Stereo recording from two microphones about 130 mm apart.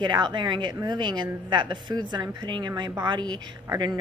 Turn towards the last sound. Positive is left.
turn(degrees=-35)  # may be behind; listen again after turning